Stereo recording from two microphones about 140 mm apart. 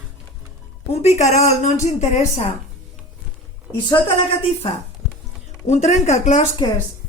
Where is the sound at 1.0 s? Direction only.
55° left (ahead or behind).